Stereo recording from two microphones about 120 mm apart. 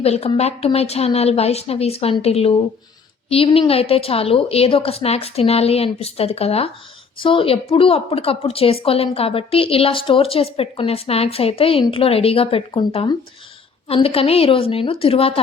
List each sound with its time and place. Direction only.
0.0 s a woman's voice: 55° left (ahead or behind)
7.2 s a woman's voice: 45° left (ahead or behind)